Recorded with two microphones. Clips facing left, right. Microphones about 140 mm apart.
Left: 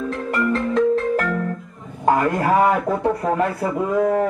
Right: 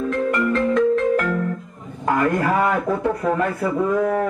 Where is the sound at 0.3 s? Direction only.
35° left (ahead or behind).